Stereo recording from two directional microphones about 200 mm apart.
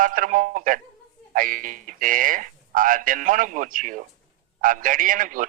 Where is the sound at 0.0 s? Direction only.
40° right (ahead or behind).